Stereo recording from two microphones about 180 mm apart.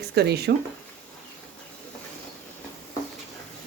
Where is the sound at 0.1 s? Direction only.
65° right (ahead or behind).